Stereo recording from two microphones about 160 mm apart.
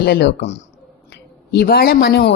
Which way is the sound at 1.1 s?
80° left.